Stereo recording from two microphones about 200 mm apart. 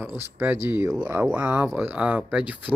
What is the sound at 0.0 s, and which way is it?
Speech, 10° right (ahead or behind).